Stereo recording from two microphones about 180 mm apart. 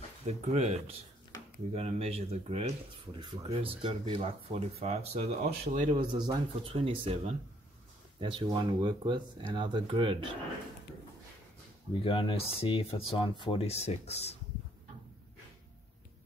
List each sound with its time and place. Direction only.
0.3 s speech: 35° right (ahead or behind)
5.9 s speech: 25° right (ahead or behind)
12.0 s speech: 30° left (ahead or behind)